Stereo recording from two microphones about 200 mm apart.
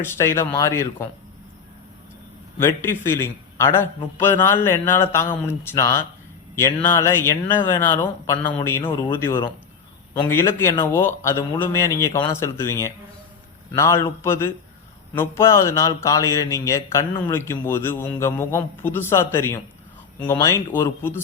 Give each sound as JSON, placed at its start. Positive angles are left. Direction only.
{"t": 0.0, "sound": "speech", "side_deg": 15}
{"t": 2.6, "sound": "speech", "side_deg": 15}